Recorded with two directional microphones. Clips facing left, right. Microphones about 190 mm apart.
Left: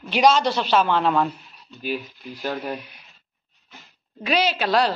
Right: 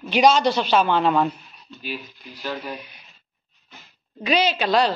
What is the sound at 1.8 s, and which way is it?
Speech, 50° left (ahead or behind).